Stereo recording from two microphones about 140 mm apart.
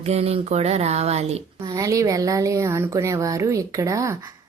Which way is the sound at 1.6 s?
25° right (ahead or behind).